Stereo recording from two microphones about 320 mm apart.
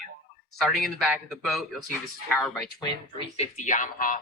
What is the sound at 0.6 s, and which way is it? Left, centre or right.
Speech, centre.